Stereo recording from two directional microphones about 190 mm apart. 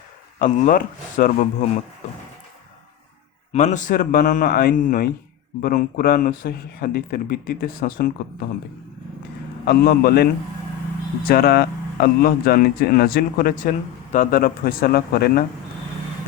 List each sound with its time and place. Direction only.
0.3 s speech: 45° left (ahead or behind)
3.5 s speech: 40° left (ahead or behind)
9.6 s a man's voice: 55° left (ahead or behind)